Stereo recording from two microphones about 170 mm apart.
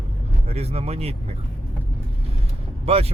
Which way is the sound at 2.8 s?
35° right (ahead or behind).